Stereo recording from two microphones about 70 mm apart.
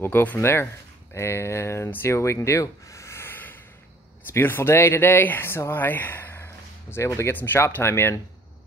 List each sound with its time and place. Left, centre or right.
0.0 s speech: left